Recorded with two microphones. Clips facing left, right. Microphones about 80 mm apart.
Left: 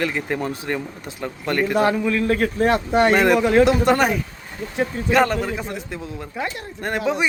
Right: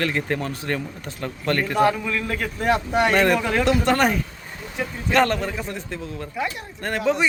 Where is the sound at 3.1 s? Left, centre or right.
Centre.